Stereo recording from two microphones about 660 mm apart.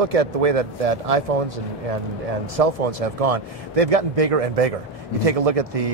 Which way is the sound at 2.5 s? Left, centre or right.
Right.